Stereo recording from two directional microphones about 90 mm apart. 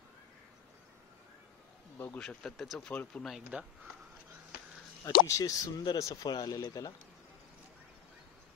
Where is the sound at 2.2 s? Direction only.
5° left (ahead or behind).